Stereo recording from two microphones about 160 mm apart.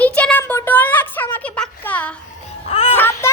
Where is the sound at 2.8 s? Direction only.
15° left (ahead or behind).